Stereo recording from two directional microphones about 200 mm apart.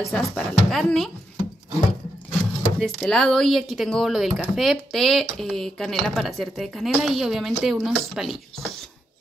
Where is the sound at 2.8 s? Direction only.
Centre (ahead or behind).